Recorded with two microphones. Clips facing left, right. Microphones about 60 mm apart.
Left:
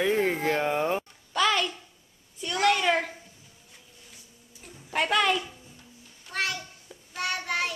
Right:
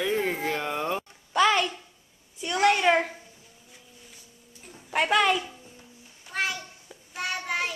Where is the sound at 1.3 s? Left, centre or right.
Centre.